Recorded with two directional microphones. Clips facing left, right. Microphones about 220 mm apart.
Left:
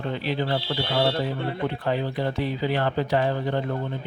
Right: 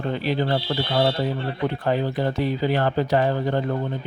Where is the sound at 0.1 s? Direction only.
40° right (ahead or behind).